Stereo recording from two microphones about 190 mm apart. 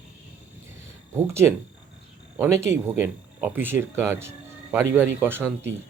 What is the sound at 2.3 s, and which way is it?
Speech, 15° right (ahead or behind).